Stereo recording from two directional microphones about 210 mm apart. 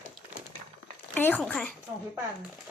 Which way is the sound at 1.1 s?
10° left (ahead or behind).